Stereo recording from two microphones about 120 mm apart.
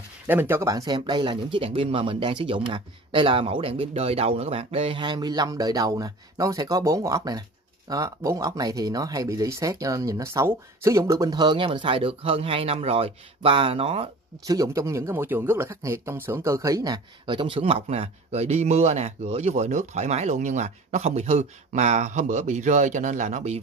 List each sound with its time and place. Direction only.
0.3 s speech: 15° right (ahead or behind); by 14.0 s 50° right (ahead or behind)
14.4 s speech: 30° right (ahead or behind); by 23.6 s 70° right (ahead or behind)